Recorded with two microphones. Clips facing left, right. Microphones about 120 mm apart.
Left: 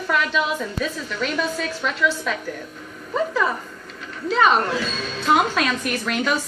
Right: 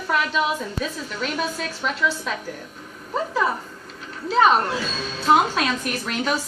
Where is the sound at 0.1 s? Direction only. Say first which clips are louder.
Left 1 dB; 40° right (ahead or behind).